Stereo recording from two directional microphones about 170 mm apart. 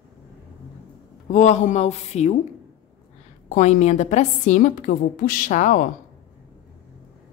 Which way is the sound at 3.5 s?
40° left (ahead or behind).